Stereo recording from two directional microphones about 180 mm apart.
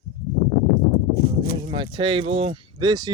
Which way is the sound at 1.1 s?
60° left (ahead or behind).